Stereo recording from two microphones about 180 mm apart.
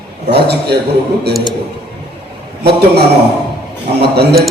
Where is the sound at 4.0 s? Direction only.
65° right (ahead or behind).